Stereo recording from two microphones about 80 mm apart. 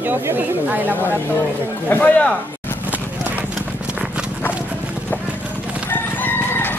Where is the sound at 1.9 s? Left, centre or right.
Centre.